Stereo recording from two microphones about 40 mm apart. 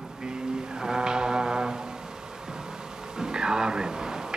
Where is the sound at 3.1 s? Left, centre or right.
Centre.